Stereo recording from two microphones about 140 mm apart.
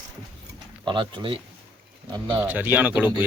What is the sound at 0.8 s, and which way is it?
Speech, 35° right (ahead or behind).